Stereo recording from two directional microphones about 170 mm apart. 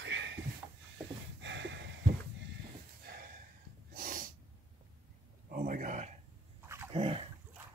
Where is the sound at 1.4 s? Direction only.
90° right.